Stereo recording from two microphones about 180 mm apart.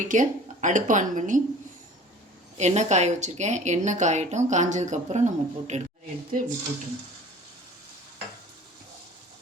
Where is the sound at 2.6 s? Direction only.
40° right (ahead or behind).